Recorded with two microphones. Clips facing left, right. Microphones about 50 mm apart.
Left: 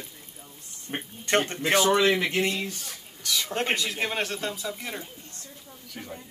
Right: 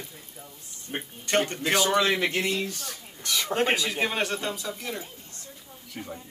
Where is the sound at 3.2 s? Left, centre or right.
Right.